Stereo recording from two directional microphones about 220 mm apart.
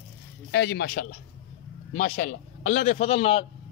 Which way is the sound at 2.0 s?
40° left (ahead or behind).